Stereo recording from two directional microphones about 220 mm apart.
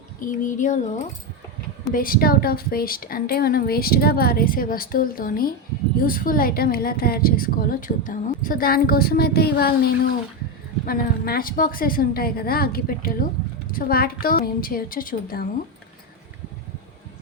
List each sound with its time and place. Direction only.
0.2 s a woman's voice: 35° left (ahead or behind)